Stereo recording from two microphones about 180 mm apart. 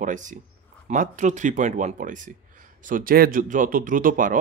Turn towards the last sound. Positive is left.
turn(degrees=-50)  # may be behind; listen again after turning